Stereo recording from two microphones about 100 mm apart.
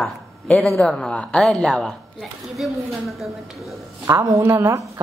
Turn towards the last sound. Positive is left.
turn(degrees=-35)  # may be behind; listen again after turning